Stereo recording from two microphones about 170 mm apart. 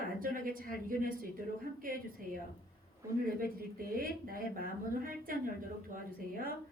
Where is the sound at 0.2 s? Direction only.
55° right (ahead or behind).